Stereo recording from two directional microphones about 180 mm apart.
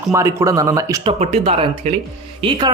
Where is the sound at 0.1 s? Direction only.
15° right (ahead or behind).